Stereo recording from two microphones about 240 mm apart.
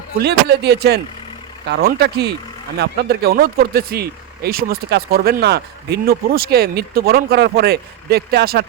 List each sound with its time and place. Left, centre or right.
0.2 s speech: right